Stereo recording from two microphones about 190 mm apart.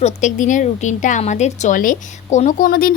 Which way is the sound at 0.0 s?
40° left (ahead or behind).